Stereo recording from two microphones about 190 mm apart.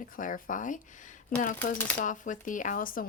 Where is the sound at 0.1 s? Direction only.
45° left (ahead or behind).